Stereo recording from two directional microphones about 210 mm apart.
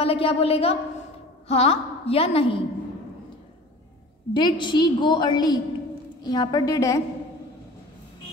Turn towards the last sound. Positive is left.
turn(degrees=15)  # may be behind; listen again after turning